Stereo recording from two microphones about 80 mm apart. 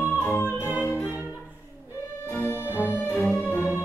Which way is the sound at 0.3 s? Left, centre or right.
Left.